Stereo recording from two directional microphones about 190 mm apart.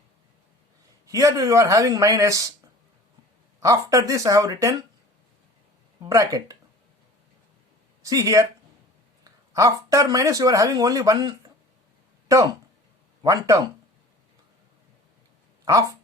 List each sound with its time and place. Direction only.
1.0 s speech: 15° right (ahead or behind)
3.6 s speech: 15° right (ahead or behind)
6.0 s speech: 15° right (ahead or behind)
8.0 s speech: 15° right (ahead or behind)
15.6 s speech: 20° right (ahead or behind)